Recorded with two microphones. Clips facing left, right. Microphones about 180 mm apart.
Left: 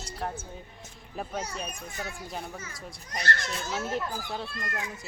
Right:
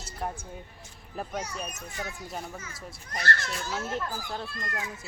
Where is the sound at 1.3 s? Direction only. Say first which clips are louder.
Left 1 dB; 5° right (ahead or behind).